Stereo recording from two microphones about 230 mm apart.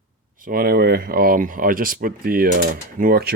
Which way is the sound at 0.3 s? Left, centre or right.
Right.